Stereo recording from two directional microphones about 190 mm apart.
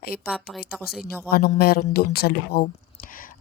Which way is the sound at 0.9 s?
55° left (ahead or behind).